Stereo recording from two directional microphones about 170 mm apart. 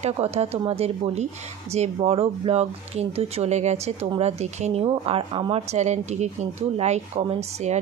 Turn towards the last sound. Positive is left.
turn(degrees=-40)  # may be behind; listen again after turning